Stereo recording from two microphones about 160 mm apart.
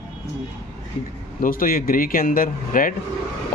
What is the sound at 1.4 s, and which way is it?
Speech, 60° left (ahead or behind).